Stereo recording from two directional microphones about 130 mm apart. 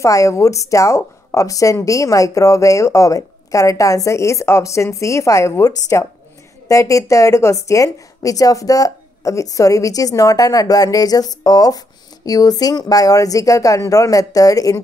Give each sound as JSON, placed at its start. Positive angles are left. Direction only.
{"t": 0.0, "sound": "a woman's voice", "side_deg": 25}